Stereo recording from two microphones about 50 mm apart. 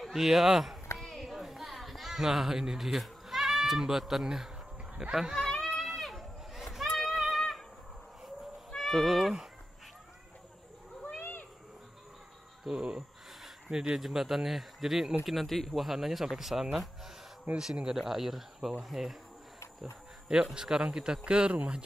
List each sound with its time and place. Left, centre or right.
0.0 s speech: centre
0.9 s children playing: centre
5.0 s speech: centre
5.5 s a sound: centre
8.7 s speech: centre
11.1 s a sound: left
12.6 s speech: centre
17.5 s speech: right
17.9 s speech: centre
20.5 s speech: centre